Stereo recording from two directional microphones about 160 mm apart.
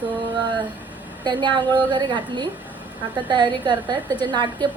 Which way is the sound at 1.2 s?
30° right (ahead or behind).